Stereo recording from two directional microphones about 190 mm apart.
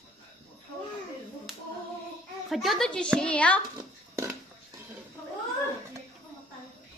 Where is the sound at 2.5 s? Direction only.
Centre (ahead or behind).